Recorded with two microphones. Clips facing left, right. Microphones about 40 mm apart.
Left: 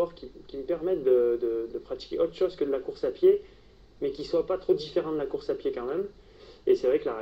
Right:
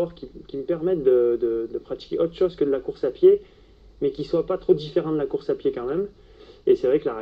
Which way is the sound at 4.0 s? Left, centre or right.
Right.